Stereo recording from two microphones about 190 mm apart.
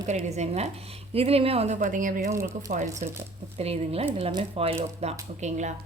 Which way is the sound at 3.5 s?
35° right (ahead or behind).